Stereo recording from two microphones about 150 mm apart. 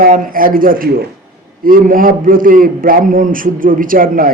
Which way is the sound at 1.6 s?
70° right (ahead or behind).